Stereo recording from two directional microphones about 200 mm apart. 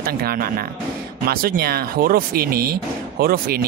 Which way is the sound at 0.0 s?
50° right (ahead or behind).